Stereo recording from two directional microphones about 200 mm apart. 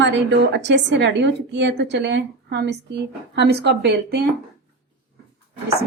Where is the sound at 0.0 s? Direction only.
65° right (ahead or behind).